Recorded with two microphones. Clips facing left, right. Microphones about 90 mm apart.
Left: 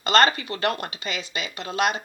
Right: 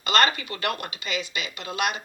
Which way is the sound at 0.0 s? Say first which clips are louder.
Left 3 dB; 35° left (ahead or behind).